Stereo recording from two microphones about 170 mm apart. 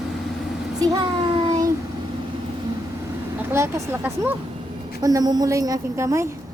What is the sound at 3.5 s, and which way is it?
A woman's voice, 15° right (ahead or behind).